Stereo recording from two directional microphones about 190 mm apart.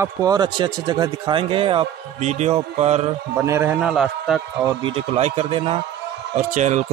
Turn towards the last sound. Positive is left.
turn(degrees=-40)  # may be behind; listen again after turning